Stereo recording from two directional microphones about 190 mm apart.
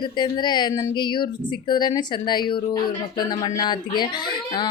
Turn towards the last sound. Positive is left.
turn(degrees=25)  # may be behind; listen again after turning